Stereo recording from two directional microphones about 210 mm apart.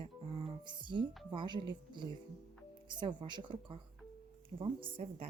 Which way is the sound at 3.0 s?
20° right (ahead or behind).